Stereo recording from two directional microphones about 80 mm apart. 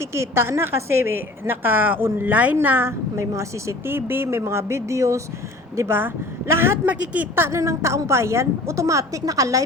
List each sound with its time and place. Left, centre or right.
0.0 s a woman's voice: right